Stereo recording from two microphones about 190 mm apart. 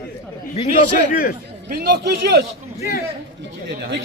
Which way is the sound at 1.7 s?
55° right (ahead or behind).